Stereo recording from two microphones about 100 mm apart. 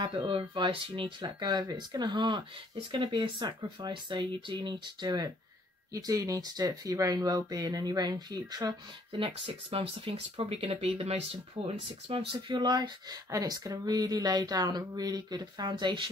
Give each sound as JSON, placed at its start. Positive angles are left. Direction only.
{"t": 0.0, "sound": "speech", "side_deg": -50}
{"t": 1.2, "sound": "speech", "side_deg": -45}
{"t": 9.1, "sound": "speech", "side_deg": -65}